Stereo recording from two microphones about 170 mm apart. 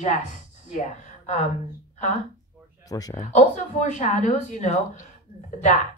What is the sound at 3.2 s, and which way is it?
Speech, 45° left (ahead or behind).